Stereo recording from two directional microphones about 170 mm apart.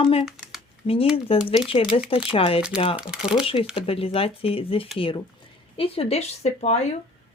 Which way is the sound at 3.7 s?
35° left (ahead or behind).